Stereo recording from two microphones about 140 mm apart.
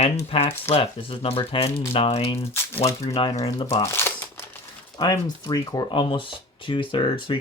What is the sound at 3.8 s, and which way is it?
Crumpling, 15° left (ahead or behind).